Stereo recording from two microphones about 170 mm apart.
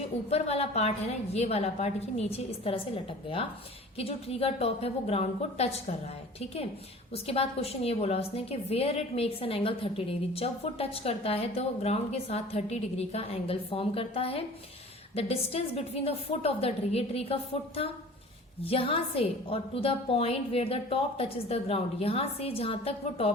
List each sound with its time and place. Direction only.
0.3 s a woman's voice: 35° left (ahead or behind)